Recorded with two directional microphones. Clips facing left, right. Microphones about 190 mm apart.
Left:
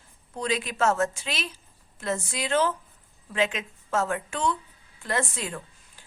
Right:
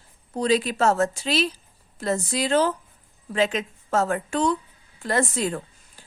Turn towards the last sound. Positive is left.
turn(degrees=-40)  # may be behind; listen again after turning